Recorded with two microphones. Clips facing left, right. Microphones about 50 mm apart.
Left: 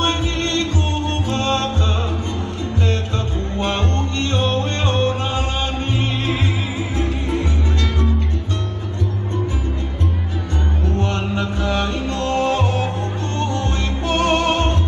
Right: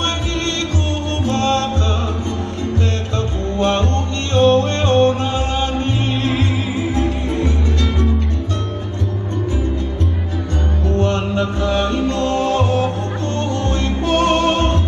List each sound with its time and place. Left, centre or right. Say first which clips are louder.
1.2 s music: right 5 dB; centre
3.5 s music: right 4 dB; centre
11.0 s mantra: right 6 dB; centre
12.1 s music: right 2 dB; centre